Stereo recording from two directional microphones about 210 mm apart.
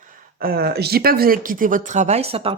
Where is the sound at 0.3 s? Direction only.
45° right (ahead or behind).